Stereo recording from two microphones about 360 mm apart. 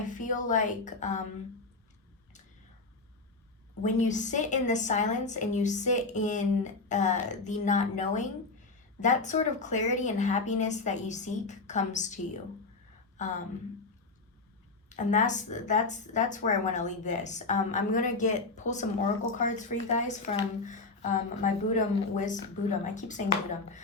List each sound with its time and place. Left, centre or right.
0.0 s a woman's voice: left
3.8 s a woman's voice: centre
14.8 s a woman's voice: centre